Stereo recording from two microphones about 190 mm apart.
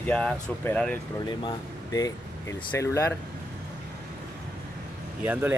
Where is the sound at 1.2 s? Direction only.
20° left (ahead or behind).